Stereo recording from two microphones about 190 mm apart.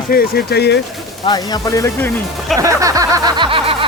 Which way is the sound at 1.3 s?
20° left (ahead or behind).